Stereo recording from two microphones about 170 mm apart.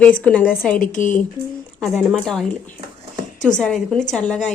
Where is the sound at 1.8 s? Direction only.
Centre (ahead or behind).